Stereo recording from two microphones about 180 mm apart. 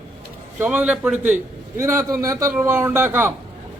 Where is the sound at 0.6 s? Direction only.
10° right (ahead or behind).